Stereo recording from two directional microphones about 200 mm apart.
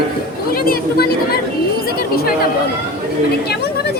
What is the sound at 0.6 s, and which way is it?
Speech, 50° left (ahead or behind).